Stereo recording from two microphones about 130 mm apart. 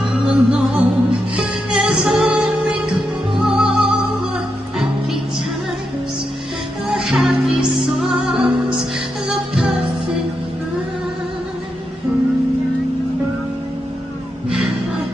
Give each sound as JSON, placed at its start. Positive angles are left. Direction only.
{"t": 0.1, "sound": "music", "side_deg": -5}
{"t": 6.9, "sound": "music", "side_deg": -5}